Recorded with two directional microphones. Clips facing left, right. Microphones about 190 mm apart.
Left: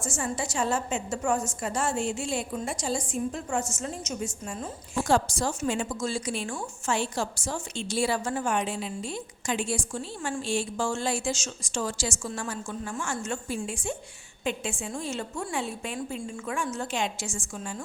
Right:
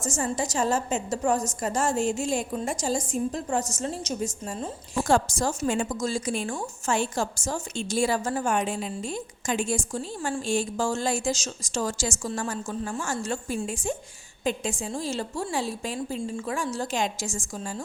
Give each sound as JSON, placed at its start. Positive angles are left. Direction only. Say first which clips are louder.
{"t": 0.0, "sound": "a woman's voice", "louder": "right 3 dB", "side_deg": -40}
{"t": 5.0, "sound": "a woman's voice", "louder": "right 2 dB", "side_deg": -50}